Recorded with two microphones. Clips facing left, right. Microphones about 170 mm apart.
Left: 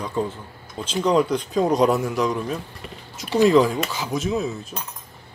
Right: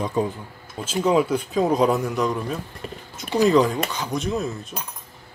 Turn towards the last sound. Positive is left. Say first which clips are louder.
# left 1 dB
turn(degrees=0)  # may be behind; listen again after turning